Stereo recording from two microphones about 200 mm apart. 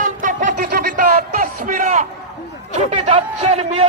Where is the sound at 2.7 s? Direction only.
35° right (ahead or behind).